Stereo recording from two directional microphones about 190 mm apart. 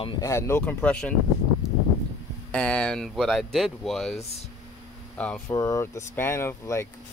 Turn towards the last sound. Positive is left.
turn(degrees=15)  # may be behind; listen again after turning